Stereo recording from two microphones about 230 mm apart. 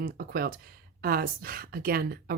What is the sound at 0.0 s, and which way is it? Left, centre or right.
A woman's voice, right.